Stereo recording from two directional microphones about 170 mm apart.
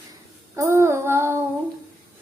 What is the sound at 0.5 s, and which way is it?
Speech, 15° right (ahead or behind).